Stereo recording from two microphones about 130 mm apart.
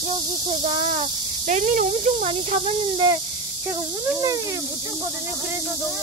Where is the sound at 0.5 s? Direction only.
65° right (ahead or behind).